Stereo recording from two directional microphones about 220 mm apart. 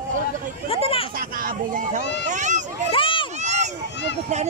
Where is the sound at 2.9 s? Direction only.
25° left (ahead or behind).